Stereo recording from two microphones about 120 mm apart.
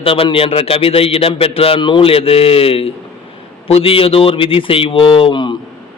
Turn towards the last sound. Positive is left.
turn(degrees=40)  # may be behind; listen again after turning